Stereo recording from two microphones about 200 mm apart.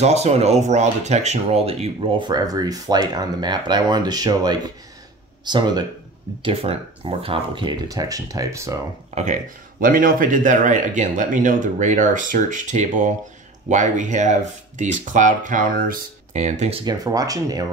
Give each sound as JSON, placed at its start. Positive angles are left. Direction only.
{"t": 0.0, "sound": "speech", "side_deg": -35}
{"t": 9.1, "sound": "a man's voice", "side_deg": -35}
{"t": 16.8, "sound": "speech", "side_deg": -20}